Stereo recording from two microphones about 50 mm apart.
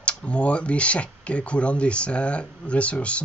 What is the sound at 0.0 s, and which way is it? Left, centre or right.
Speech, left.